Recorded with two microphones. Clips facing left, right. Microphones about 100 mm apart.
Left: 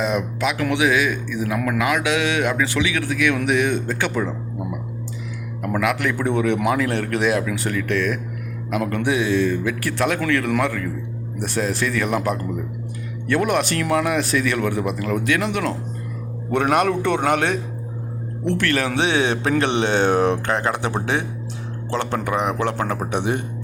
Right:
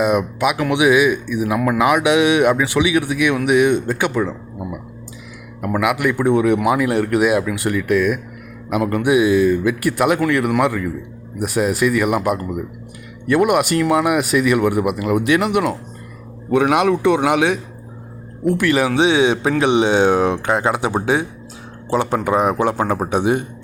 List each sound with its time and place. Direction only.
0.0 s speech: 10° right (ahead or behind)
4.1 s a sound: centre (ahead or behind)
5.6 s speech: 10° right (ahead or behind)
22.2 s a man's voice: 20° right (ahead or behind)